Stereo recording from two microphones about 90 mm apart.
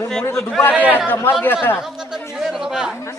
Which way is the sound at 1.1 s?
25° left (ahead or behind).